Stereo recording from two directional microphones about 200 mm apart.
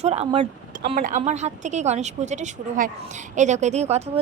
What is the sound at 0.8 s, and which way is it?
A woman's voice, 45° right (ahead or behind).